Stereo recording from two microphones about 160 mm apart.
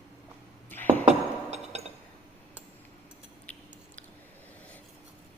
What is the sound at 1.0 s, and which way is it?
Chink, 40° right (ahead or behind).